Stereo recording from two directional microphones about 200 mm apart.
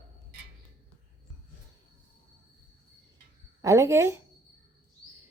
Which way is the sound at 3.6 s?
15° right (ahead or behind).